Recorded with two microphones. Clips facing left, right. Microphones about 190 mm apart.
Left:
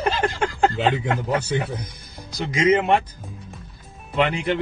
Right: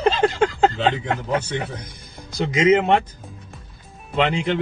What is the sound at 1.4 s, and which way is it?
Speech, 10° left (ahead or behind).